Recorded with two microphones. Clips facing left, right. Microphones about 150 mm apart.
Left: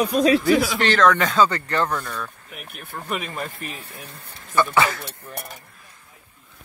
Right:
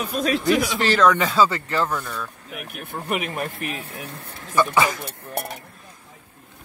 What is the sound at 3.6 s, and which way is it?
Sheep, 80° right.